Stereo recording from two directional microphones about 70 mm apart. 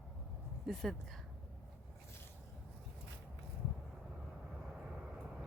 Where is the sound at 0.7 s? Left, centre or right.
Centre.